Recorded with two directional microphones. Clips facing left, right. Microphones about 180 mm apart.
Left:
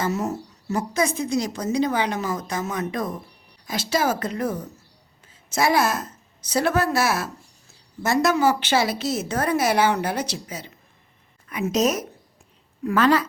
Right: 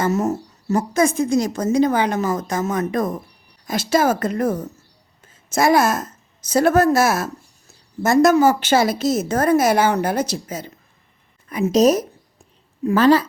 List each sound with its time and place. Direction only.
0.0 s a woman's voice: 45° right (ahead or behind)
11.4 s a woman's voice: 35° right (ahead or behind)